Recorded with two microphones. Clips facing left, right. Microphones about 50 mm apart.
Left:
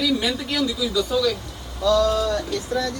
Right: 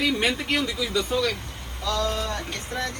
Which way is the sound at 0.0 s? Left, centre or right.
Right.